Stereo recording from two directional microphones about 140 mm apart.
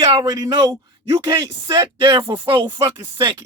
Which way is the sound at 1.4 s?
35° right (ahead or behind).